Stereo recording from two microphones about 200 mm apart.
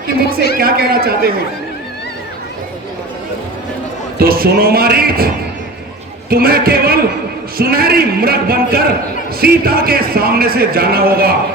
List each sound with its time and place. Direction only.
0.6 s speech: 50° right (ahead or behind)
4.2 s speech: 50° right (ahead or behind)
6.3 s speech: 50° right (ahead or behind)